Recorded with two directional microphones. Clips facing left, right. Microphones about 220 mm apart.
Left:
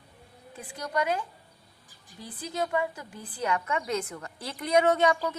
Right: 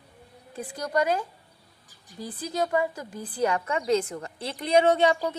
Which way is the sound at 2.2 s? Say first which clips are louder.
Right 3 dB; 40° right (ahead or behind).